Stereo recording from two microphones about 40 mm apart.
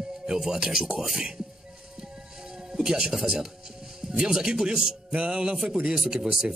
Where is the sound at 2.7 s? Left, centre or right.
Centre.